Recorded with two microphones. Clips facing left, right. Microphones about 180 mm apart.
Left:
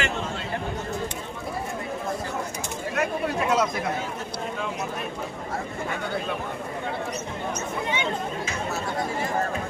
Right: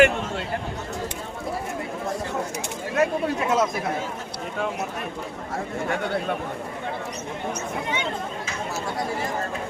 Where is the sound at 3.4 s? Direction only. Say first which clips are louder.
Right 1 dB; 25° right (ahead or behind).